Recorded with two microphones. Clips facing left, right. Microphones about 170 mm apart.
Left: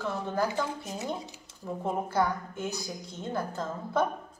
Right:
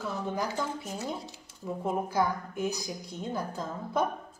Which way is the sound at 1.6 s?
10° right (ahead or behind).